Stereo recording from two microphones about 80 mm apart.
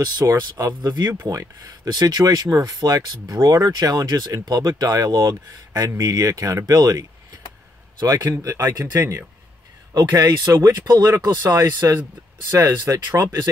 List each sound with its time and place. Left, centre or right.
0.0 s speech: right
11.8 s speech: right